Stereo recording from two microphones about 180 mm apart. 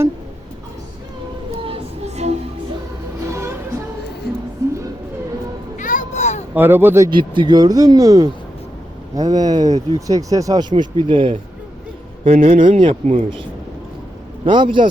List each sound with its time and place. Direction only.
1.6 s music: 35° right (ahead or behind)
3.3 s music: 15° right (ahead or behind)
5.7 s a sound: 45° left (ahead or behind)
6.5 s speech: 10° right (ahead or behind)
7.1 s speech: 25° right (ahead or behind)
14.4 s speech: 25° right (ahead or behind)